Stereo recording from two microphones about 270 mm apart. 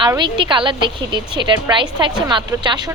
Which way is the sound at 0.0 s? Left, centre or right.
Centre.